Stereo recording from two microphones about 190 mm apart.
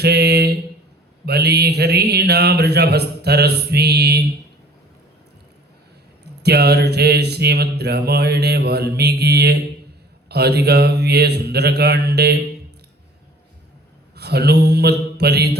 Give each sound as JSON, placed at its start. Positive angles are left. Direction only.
{"t": 0.0, "sound": "speech", "side_deg": -60}
{"t": 1.2, "sound": "mantra", "side_deg": -60}
{"t": 6.4, "sound": "mantra", "side_deg": -60}
{"t": 14.2, "sound": "mantra", "side_deg": -60}